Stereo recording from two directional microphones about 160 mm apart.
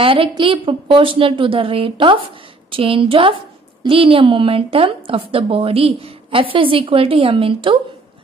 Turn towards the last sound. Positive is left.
turn(degrees=-35)  # may be behind; listen again after turning